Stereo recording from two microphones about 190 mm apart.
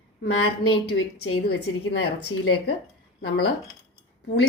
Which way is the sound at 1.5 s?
60° left (ahead or behind).